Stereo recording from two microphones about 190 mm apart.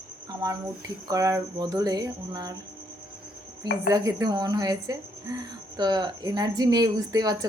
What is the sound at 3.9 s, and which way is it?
Speech, 20° right (ahead or behind).